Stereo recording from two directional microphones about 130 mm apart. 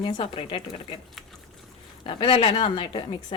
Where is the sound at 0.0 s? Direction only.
40° left (ahead or behind).